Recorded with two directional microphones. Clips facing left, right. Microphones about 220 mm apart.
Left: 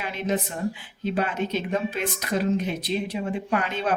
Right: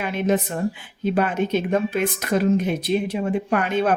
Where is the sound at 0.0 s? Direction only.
55° right (ahead or behind).